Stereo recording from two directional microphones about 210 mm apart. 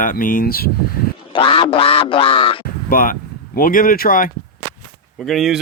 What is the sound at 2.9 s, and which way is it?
Speech, 40° left (ahead or behind).